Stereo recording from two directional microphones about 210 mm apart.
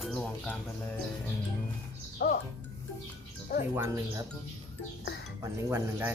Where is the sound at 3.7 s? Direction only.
10° right (ahead or behind).